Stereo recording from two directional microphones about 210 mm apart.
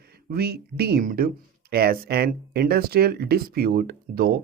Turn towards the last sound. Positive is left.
turn(degrees=-45)  # may be behind; listen again after turning